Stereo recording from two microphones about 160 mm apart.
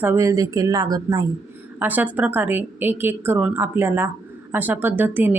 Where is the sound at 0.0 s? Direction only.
15° right (ahead or behind).